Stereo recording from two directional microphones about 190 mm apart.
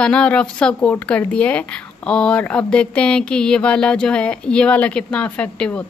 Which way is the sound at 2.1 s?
5° left (ahead or behind).